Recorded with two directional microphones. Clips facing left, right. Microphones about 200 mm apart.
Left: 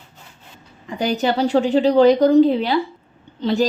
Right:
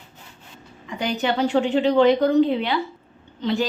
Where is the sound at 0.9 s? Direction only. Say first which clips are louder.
Left 4 dB; 40° left (ahead or behind).